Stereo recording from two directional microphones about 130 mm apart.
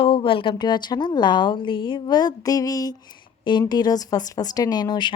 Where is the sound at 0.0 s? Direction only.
40° left (ahead or behind).